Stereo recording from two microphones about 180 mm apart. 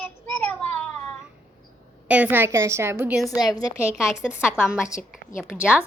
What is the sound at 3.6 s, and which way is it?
Speech, 20° left (ahead or behind).